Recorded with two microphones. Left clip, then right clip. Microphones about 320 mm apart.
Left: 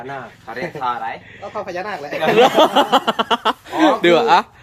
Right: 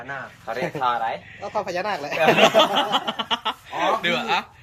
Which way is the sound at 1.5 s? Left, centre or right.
Right.